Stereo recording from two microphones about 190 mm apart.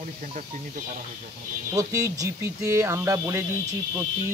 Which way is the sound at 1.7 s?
15° right (ahead or behind).